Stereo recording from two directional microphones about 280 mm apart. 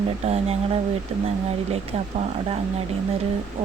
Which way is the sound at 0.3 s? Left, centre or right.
Right.